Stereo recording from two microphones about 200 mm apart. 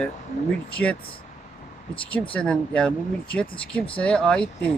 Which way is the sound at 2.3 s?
5° left (ahead or behind).